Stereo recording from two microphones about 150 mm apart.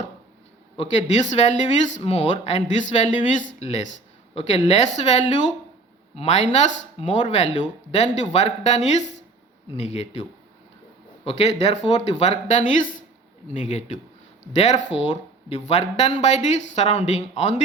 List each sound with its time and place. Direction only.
0.8 s speech: 50° left (ahead or behind)
4.4 s speech: 40° left (ahead or behind)
11.3 s speech: 45° left (ahead or behind)